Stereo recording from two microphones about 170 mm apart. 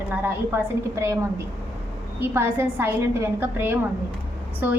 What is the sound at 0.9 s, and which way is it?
A woman's voice, 15° right (ahead or behind).